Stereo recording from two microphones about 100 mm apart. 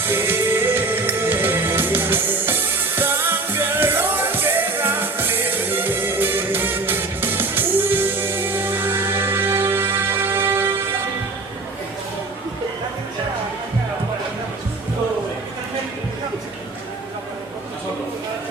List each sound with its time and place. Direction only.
0.1 s music: 20° right (ahead or behind)